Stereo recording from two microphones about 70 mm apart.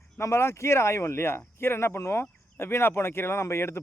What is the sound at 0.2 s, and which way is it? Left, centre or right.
Speech, left.